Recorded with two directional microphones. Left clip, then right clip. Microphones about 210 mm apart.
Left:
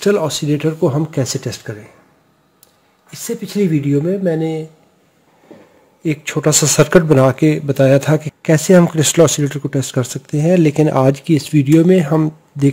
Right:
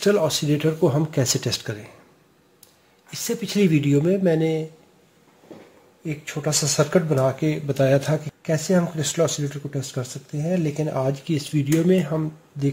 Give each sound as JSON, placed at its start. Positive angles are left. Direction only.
{"t": 0.0, "sound": "speech", "side_deg": 30}
{"t": 3.1, "sound": "speech", "side_deg": 20}
{"t": 3.9, "sound": "speech", "side_deg": 5}
{"t": 4.2, "sound": "speech", "side_deg": 20}
{"t": 6.0, "sound": "speech", "side_deg": 55}
{"t": 12.1, "sound": "speech", "side_deg": 50}